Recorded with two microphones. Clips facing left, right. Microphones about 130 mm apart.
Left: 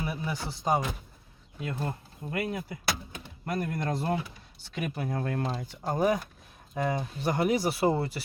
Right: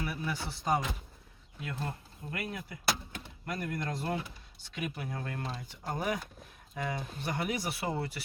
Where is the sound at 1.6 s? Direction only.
30° left (ahead or behind).